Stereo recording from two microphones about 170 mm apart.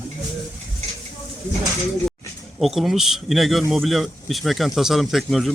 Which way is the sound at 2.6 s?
Centre (ahead or behind).